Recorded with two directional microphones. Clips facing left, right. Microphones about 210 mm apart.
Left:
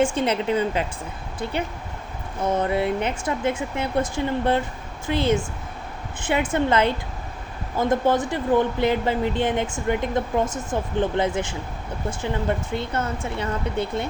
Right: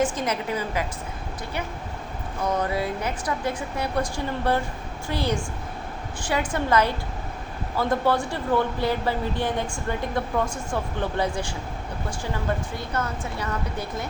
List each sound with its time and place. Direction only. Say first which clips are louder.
0.0 s a woman's voice: left 4 dB; 30° left (ahead or behind)
6.5 s a woman's voice: left 2 dB; 25° left (ahead or behind)
12.7 s a woman's voice: left 3 dB; 25° left (ahead or behind)